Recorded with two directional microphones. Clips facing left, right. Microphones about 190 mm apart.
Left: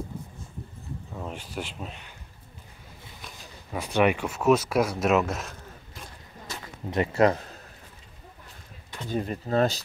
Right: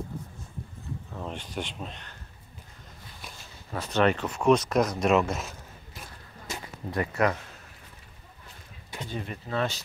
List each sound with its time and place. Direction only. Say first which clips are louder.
1.1 s speech: even; 5° left (ahead or behind)
3.7 s speech: left 1 dB; 10° left (ahead or behind)
6.9 s speech: left 4 dB; 25° left (ahead or behind)
9.1 s speech: left 7 dB; 40° left (ahead or behind)